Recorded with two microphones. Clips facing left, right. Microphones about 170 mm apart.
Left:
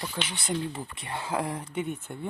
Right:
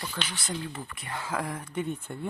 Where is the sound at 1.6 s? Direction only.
10° left (ahead or behind).